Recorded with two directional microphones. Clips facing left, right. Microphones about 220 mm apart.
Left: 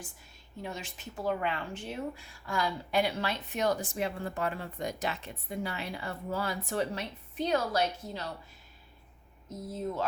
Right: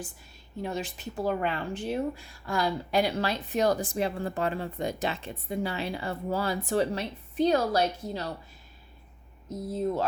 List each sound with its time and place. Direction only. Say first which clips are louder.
0.6 s speech: right 7 dB; 35° right (ahead or behind)
9.7 s speech: right 5 dB; 35° right (ahead or behind)